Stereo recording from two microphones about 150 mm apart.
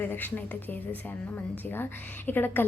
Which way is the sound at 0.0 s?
10° left (ahead or behind).